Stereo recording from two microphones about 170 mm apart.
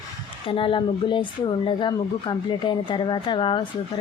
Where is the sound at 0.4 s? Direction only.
30° left (ahead or behind).